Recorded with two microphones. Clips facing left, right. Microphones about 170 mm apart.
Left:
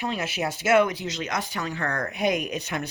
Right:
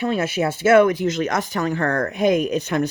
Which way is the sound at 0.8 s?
50° right (ahead or behind).